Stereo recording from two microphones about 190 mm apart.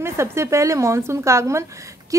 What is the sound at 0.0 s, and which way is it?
A woman's voice, 15° right (ahead or behind).